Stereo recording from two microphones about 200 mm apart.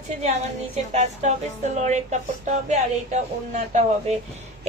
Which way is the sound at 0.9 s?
35° right (ahead or behind).